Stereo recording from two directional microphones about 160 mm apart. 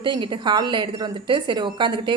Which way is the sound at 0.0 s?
30° right (ahead or behind).